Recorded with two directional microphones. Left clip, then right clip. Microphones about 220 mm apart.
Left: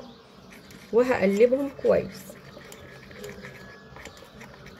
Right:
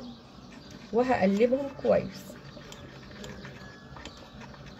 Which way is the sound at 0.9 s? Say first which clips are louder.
Left 4 dB; 25° left (ahead or behind).